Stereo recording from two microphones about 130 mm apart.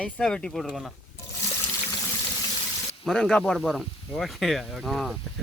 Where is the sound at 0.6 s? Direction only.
5° right (ahead or behind).